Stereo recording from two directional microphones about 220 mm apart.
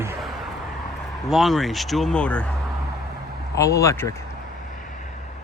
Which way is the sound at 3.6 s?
15° left (ahead or behind).